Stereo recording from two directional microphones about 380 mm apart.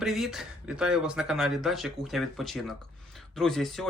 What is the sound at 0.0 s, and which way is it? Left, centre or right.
Speech, centre.